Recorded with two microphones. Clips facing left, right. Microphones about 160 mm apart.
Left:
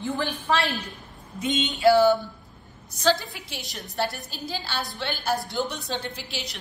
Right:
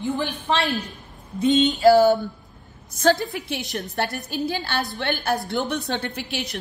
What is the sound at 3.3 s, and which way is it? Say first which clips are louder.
A woman's voice: right 10 dB; 60° right (ahead or behind).